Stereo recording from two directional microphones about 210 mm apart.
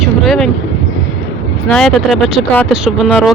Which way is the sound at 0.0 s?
Centre (ahead or behind).